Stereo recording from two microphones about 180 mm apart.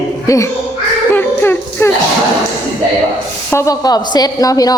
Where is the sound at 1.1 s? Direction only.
10° left (ahead or behind).